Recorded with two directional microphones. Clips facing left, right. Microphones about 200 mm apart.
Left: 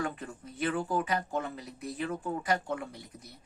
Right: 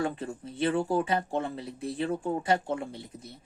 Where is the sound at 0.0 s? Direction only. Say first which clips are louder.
Right 4 dB; 30° right (ahead or behind).